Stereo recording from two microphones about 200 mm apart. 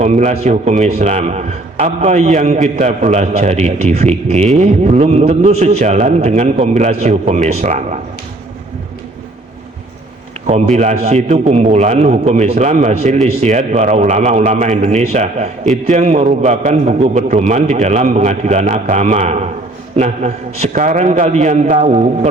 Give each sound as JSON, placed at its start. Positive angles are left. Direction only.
{"t": 0.0, "sound": "a man's voice", "side_deg": -35}
{"t": 10.4, "sound": "a man's voice", "side_deg": -35}